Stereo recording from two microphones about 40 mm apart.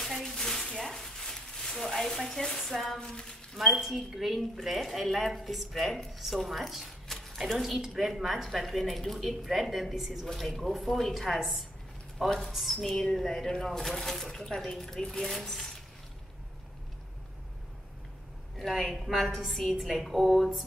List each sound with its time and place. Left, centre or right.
0.2 s a sound: centre
1.8 s a woman's voice: centre
3.0 s speech: centre
3.5 s a woman's voice: centre
7.1 s a sound: centre
7.3 s a woman's voice: centre
10.2 s a woman's voice: centre
12.8 s speech: centre
18.6 s a woman's voice: centre